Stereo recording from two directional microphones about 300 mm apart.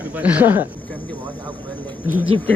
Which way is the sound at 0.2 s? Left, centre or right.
Centre.